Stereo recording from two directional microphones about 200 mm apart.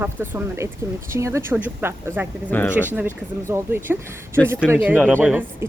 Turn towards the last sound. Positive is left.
turn(degrees=-10)  # may be behind; listen again after turning